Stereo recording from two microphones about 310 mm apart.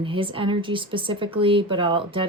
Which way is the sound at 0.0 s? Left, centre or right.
Centre.